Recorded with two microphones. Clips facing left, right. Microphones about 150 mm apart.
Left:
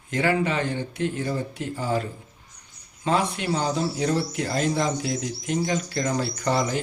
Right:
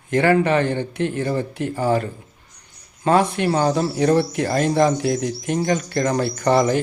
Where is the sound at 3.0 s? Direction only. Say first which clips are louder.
Right 6 dB; 55° right (ahead or behind).